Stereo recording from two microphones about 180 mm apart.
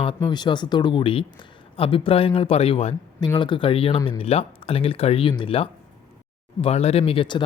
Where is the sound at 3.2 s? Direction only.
25° left (ahead or behind).